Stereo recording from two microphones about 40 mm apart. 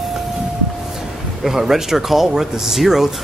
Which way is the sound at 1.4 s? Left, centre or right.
Centre.